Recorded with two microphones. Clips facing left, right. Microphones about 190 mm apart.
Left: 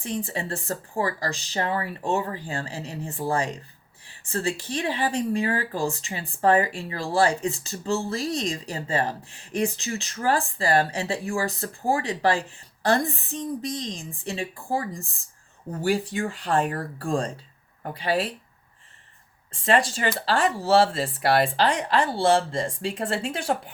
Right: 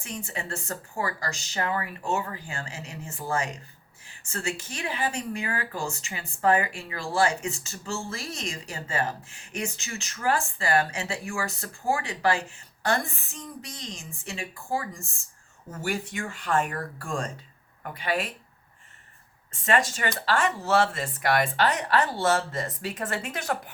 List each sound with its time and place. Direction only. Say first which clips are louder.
0.0 s speech: left 6 dB; 35° left (ahead or behind)
19.5 s speech: left 3 dB; 30° left (ahead or behind)